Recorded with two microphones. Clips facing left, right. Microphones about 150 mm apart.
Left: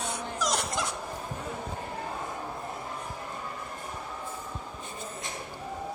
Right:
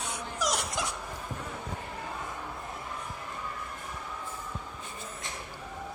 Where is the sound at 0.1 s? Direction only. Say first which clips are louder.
Right 1 dB; 10° right (ahead or behind).